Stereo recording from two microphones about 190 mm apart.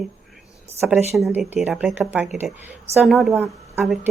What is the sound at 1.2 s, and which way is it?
A woman's voice, centre (ahead or behind).